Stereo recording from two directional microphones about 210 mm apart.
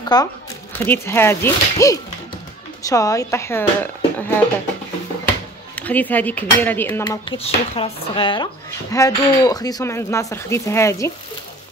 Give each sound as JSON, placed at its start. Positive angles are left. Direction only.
{"t": 0.1, "sound": "speech", "side_deg": 20}
{"t": 5.8, "sound": "speech", "side_deg": 5}
{"t": 7.1, "sound": "speech", "side_deg": 25}